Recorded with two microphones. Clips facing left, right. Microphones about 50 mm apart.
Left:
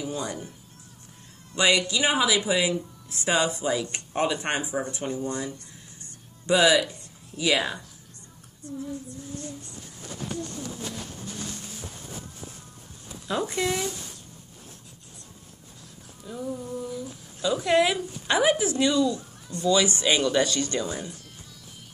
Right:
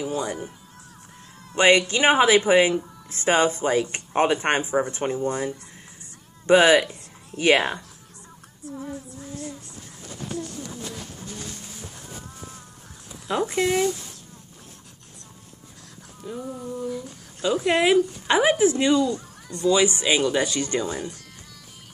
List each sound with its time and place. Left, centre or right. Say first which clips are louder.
0.0 s speech: right 4 dB; centre
1.5 s speech: right 5 dB; right
6.4 s speech: right 4 dB; right
13.3 s speech: right 4 dB; right
16.3 s speech: right 1 dB; centre; by 19.2 s right
19.7 s speech: right 2 dB; right